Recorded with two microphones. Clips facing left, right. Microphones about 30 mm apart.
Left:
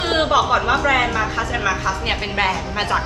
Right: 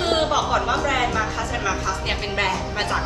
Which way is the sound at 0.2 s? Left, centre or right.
Left.